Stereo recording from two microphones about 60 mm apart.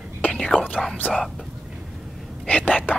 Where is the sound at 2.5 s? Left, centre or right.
Left.